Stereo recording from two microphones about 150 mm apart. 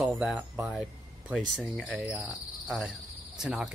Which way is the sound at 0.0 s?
10° right (ahead or behind).